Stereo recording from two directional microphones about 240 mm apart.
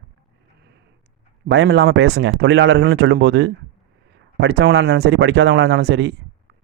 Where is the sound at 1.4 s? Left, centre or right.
Right.